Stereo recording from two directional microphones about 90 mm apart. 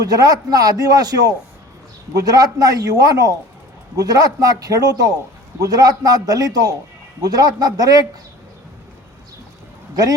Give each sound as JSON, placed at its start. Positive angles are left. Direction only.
{"t": 0.0, "sound": "a man's voice", "side_deg": -45}
{"t": 9.9, "sound": "speech", "side_deg": -45}